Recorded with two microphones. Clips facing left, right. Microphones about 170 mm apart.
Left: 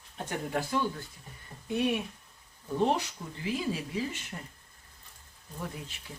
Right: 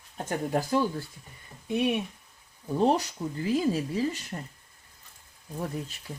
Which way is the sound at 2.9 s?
40° right (ahead or behind).